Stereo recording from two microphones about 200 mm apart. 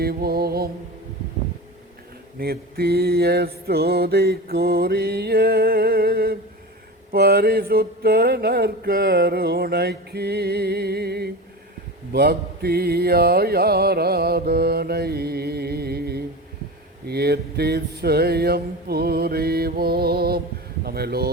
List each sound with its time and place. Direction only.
0.0 s mantra: 50° right (ahead or behind)
2.4 s mantra: 50° right (ahead or behind)